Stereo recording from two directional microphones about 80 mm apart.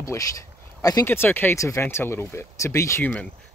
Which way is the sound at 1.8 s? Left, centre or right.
Left.